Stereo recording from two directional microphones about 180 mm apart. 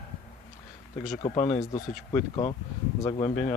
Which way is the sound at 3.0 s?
25° left (ahead or behind).